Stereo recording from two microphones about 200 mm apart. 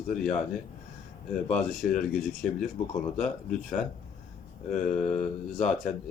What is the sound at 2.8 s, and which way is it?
Speech, 30° left (ahead or behind).